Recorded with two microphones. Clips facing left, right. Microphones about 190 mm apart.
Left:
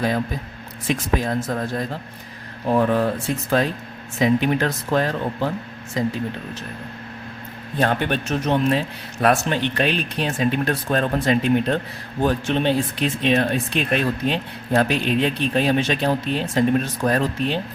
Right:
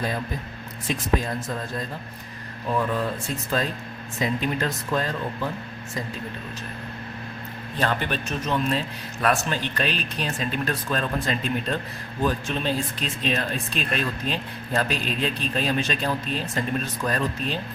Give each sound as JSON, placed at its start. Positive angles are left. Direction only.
{"t": 1.2, "sound": "speech", "side_deg": 70}
{"t": 2.6, "sound": "speech", "side_deg": 55}
{"t": 4.2, "sound": "speech", "side_deg": 70}
{"t": 7.8, "sound": "speech", "side_deg": 60}